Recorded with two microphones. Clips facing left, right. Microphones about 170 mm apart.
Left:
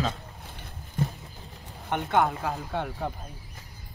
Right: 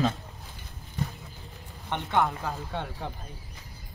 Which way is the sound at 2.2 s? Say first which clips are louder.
Left 2 dB; 5° left (ahead or behind).